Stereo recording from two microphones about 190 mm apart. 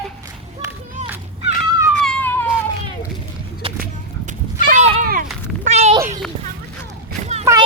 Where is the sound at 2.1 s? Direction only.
10° left (ahead or behind).